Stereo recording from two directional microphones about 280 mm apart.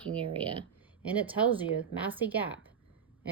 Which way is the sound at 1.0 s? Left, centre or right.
Centre.